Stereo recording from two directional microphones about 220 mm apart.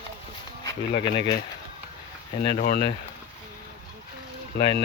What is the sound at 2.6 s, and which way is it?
Speech, 45° left (ahead or behind).